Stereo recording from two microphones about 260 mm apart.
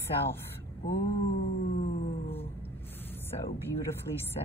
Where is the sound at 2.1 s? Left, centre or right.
Left.